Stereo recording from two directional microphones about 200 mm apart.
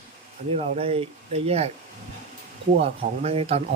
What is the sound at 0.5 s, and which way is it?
Speech, 30° right (ahead or behind).